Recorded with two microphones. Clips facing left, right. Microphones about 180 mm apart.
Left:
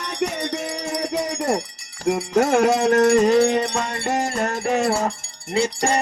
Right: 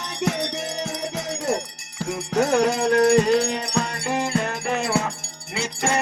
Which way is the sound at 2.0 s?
50° left (ahead or behind).